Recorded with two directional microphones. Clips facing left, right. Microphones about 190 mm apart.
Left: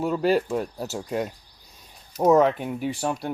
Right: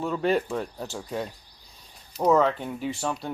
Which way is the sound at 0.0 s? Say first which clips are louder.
Left 3 dB; 5° left (ahead or behind).